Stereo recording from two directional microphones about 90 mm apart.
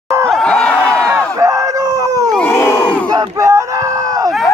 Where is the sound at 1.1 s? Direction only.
35° right (ahead or behind).